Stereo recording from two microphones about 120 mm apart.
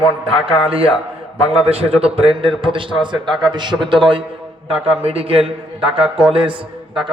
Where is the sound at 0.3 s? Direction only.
50° right (ahead or behind).